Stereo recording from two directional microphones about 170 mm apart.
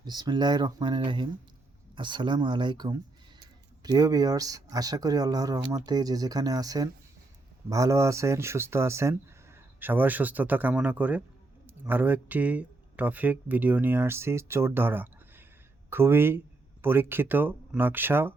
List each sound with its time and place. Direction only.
0.0 s speech: 25° right (ahead or behind)